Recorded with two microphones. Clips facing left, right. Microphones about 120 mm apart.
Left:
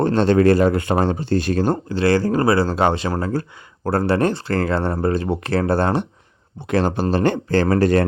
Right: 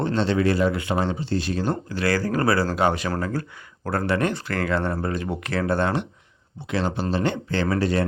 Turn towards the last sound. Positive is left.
turn(degrees=45)  # may be behind; listen again after turning